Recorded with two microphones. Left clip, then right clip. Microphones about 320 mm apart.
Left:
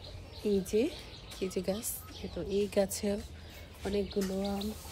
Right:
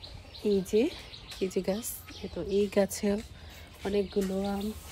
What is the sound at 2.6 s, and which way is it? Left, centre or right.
Speech, right.